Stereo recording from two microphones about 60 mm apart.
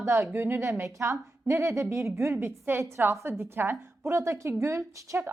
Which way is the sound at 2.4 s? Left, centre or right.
Right.